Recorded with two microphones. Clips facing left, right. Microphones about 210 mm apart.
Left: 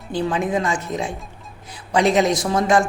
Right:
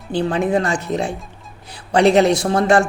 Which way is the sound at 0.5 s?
70° right (ahead or behind).